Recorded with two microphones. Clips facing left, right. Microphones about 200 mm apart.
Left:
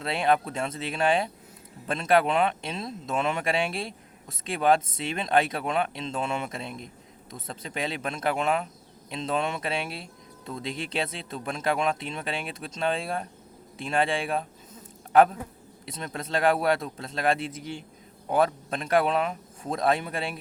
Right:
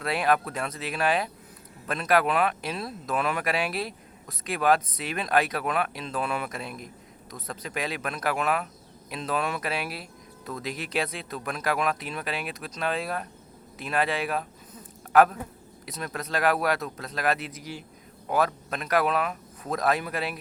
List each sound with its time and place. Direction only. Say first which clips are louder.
0.0 s a man's voice: even; 25° left (ahead or behind)